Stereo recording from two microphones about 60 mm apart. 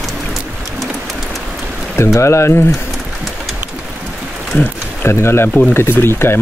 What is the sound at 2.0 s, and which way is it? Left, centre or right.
Speech, left.